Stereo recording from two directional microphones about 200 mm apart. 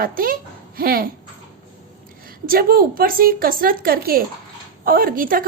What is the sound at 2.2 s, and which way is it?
A woman's voice, 45° right (ahead or behind).